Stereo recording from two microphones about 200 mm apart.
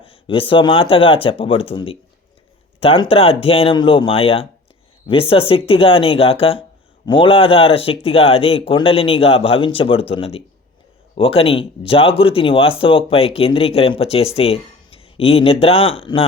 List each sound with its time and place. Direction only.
0.0 s speech: 25° left (ahead or behind)